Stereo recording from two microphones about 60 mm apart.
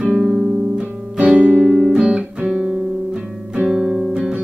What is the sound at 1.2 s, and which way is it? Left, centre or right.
Music, right.